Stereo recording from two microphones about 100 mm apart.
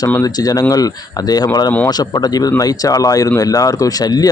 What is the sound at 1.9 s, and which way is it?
Speech, 40° left (ahead or behind).